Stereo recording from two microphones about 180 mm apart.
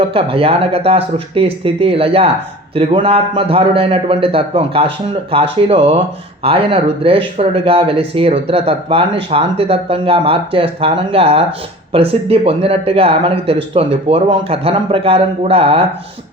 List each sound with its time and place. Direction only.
0.1 s speech: 30° right (ahead or behind)